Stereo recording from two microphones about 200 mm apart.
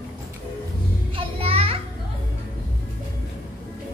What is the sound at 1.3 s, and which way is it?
Children playing, 30° right (ahead or behind).